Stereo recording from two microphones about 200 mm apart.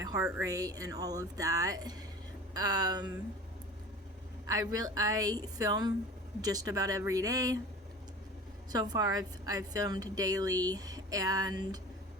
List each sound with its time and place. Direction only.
0.0 s a woman's voice: 15° right (ahead or behind)
4.4 s a woman's voice: 20° right (ahead or behind)
8.7 s a woman's voice: 20° right (ahead or behind)